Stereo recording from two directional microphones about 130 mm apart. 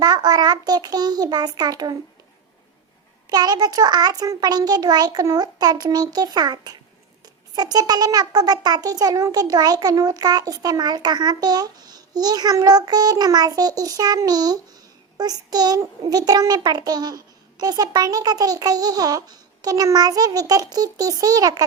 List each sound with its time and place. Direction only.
0.0 s a child's voice: 30° right (ahead or behind)
3.2 s a child's voice: 30° right (ahead or behind)